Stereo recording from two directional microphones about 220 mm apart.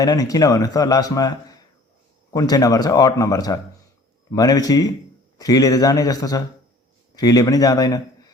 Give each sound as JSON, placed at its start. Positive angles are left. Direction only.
{"t": 0.0, "sound": "speech", "side_deg": 15}